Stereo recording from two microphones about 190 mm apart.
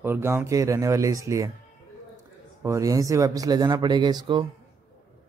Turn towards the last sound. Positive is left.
turn(degrees=-20)  # may be behind; listen again after turning